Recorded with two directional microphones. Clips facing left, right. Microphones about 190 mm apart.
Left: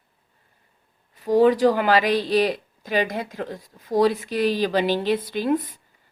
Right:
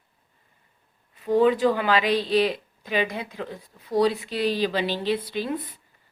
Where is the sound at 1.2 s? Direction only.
40° left (ahead or behind).